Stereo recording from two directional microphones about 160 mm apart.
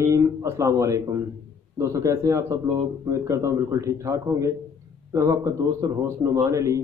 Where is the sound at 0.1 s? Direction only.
20° right (ahead or behind).